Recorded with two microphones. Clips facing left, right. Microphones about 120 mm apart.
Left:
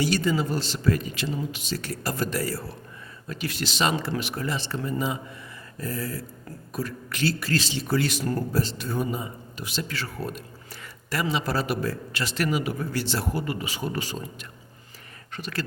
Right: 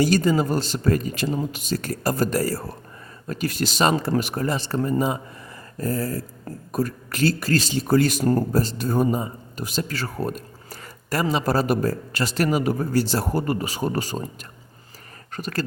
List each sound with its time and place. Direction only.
0.0 s speech: 45° right (ahead or behind)
15.3 s speech: 45° right (ahead or behind)